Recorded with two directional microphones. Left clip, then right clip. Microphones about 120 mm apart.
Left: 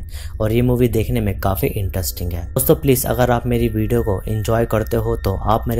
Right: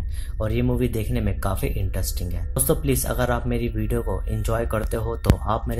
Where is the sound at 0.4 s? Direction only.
50° left (ahead or behind).